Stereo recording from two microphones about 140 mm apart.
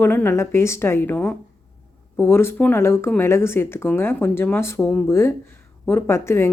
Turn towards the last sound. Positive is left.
turn(degrees=20)  # may be behind; listen again after turning